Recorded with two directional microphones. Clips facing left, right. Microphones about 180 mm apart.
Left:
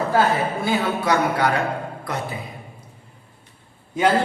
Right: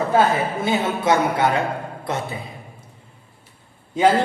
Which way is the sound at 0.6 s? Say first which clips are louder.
Right 1 dB; 20° right (ahead or behind).